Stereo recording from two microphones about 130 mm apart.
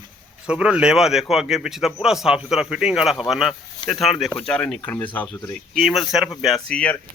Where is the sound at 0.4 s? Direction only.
5° right (ahead or behind); by 5.3 s 10° left (ahead or behind).